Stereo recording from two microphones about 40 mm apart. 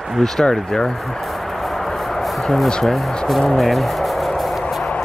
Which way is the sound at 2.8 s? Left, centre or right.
Centre.